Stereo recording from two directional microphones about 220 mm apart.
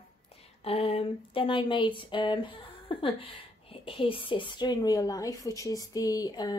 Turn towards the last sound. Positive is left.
turn(degrees=20)  # may be behind; listen again after turning